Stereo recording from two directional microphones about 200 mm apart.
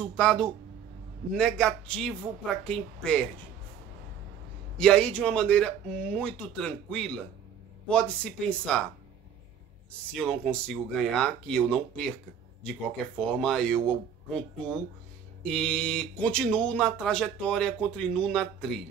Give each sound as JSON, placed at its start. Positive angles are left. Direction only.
{"t": 0.1, "sound": "speech", "side_deg": 5}
{"t": 4.7, "sound": "speech", "side_deg": 5}
{"t": 10.1, "sound": "speech", "side_deg": 5}
{"t": 13.3, "sound": "speech", "side_deg": 5}